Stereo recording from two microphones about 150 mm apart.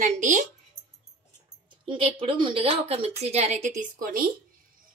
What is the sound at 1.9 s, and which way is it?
A woman's voice, 35° right (ahead or behind).